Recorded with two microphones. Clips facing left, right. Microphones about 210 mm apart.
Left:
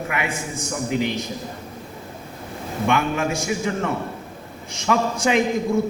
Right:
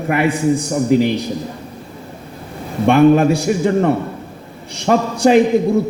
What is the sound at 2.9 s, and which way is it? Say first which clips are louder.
A man's voice: right 12 dB; 35° right (ahead or behind).